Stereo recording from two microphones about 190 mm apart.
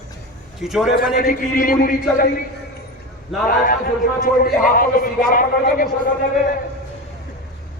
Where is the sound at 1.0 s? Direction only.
50° left (ahead or behind).